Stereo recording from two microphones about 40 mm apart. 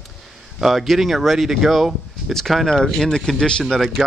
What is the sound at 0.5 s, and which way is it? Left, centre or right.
Speech, centre.